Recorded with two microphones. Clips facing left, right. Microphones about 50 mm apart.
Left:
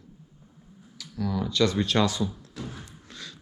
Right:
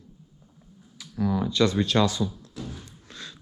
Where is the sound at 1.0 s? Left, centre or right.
Right.